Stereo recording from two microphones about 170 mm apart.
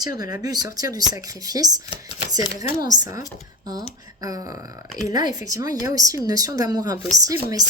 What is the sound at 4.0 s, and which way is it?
Speech, 20° right (ahead or behind).